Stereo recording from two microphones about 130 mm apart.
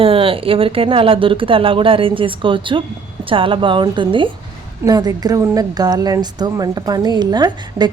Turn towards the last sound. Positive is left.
turn(degrees=-30)  # may be behind; listen again after turning